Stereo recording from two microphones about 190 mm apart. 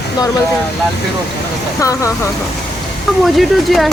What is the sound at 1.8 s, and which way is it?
Speech, 15° left (ahead or behind).